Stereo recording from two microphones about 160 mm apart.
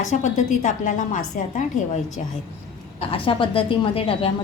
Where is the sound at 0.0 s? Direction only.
50° left (ahead or behind).